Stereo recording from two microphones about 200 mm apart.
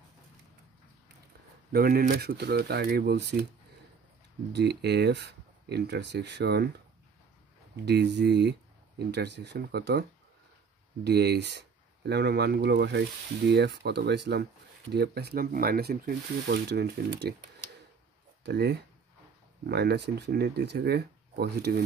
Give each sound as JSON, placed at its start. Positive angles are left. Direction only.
{"t": 1.7, "sound": "speech", "side_deg": -50}
{"t": 4.5, "sound": "speech", "side_deg": -55}
{"t": 7.7, "sound": "speech", "side_deg": -55}
{"t": 11.1, "sound": "speech", "side_deg": -55}
{"t": 18.4, "sound": "speech", "side_deg": -55}